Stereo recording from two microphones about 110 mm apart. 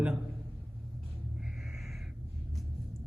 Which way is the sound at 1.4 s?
5° right (ahead or behind).